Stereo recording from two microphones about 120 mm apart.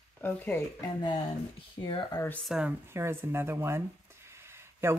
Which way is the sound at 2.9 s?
20° right (ahead or behind).